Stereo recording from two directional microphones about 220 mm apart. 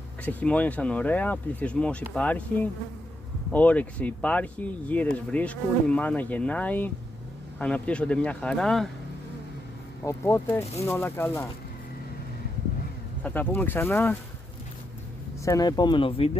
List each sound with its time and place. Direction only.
0.2 s speech: 5° left (ahead or behind)
10.0 s speech: 10° left (ahead or behind)
13.2 s speech: 10° left (ahead or behind)
15.4 s speech: 15° left (ahead or behind)